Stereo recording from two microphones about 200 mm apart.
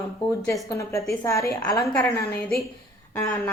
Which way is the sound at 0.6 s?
15° left (ahead or behind).